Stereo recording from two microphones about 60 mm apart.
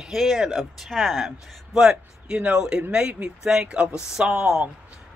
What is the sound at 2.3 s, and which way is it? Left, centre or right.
Speech, centre.